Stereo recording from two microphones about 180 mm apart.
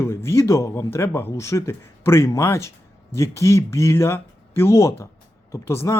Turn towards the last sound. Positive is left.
turn(degrees=15)  # may be behind; listen again after turning